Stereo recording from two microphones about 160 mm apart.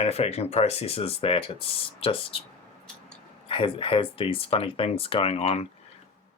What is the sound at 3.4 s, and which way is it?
Speech, 35° left (ahead or behind).